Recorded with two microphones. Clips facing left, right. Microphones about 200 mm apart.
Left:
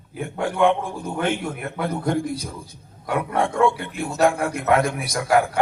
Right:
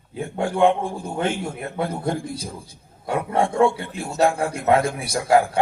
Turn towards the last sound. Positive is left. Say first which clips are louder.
# right 1 dB
turn(degrees=-30)  # may be behind; listen again after turning